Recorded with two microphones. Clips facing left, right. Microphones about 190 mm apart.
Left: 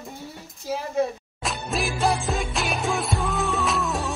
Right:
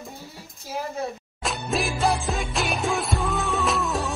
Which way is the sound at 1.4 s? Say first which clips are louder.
Right 1 dB; centre (ahead or behind).